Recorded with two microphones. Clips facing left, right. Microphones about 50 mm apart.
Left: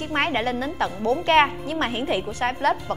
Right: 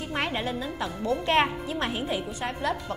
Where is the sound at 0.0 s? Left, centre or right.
Left.